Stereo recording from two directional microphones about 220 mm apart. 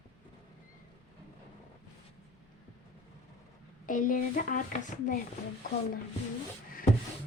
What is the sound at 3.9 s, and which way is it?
Speech, 40° left (ahead or behind).